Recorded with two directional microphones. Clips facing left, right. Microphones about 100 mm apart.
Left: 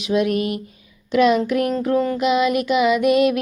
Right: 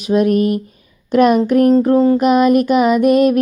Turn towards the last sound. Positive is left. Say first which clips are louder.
# right 5 dB
turn(degrees=-40)  # may be behind; listen again after turning